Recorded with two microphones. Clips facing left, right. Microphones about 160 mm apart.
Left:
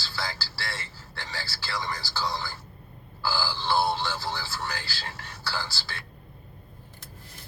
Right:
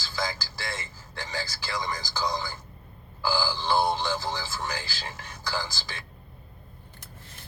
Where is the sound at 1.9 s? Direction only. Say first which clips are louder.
Right 3 dB; 15° right (ahead or behind).